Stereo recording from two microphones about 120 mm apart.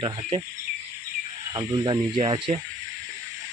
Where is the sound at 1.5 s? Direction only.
35° right (ahead or behind).